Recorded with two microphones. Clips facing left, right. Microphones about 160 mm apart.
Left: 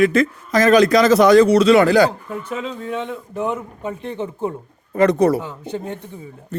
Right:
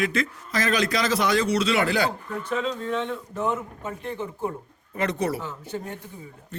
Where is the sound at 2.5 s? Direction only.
10° left (ahead or behind).